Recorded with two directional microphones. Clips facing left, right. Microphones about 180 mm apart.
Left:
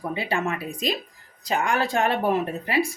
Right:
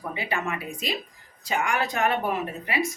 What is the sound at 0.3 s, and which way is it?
A woman's voice, 30° left (ahead or behind).